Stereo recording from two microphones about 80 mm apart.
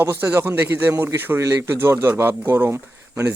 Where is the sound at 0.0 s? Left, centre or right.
Right.